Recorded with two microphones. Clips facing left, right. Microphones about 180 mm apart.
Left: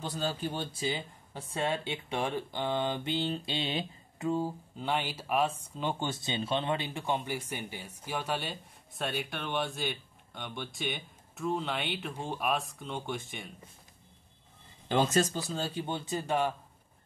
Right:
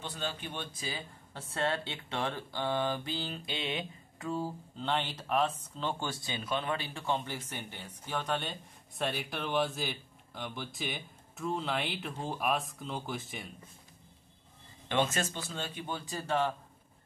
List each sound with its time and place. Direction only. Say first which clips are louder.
0.0 s speech: left 5 dB; 40° left (ahead or behind)
1.3 s speech: left 1 dB; 15° left (ahead or behind); by 4.3 s 30° left (ahead or behind)
4.3 s speech: left 4 dB; 15° left (ahead or behind)
14.9 s speech: left 4 dB; 35° left (ahead or behind); by 16.5 s 15° left (ahead or behind)